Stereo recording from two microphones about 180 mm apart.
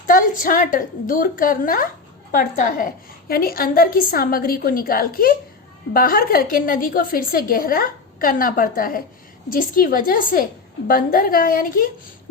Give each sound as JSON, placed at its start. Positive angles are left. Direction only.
{"t": 0.1, "sound": "a woman's voice", "side_deg": 50}